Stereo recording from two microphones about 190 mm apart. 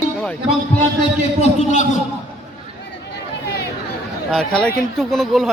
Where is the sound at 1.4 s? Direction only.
40° left (ahead or behind).